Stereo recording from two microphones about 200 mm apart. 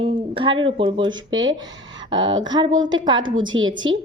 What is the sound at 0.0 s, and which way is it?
A woman's voice, 25° right (ahead or behind).